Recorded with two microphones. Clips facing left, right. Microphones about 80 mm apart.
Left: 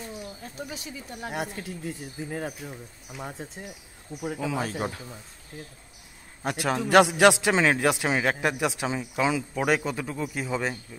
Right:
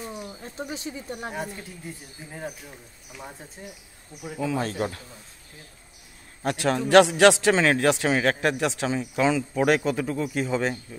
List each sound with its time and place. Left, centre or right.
0.4 s speech: right
2.1 s speech: left
4.4 s a man's voice: centre
6.4 s a man's voice: centre